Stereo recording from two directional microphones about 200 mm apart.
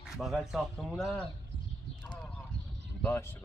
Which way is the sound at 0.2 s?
Centre (ahead or behind).